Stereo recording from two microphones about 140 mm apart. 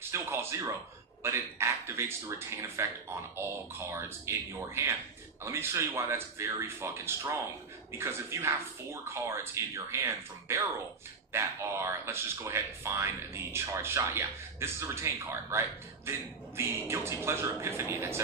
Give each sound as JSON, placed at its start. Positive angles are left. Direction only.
{"t": 0.1, "sound": "speech", "side_deg": -20}